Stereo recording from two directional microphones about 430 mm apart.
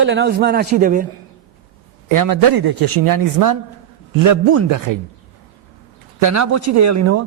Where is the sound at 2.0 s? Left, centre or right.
Right.